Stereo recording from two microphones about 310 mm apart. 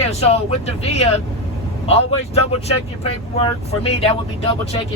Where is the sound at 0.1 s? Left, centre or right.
Centre.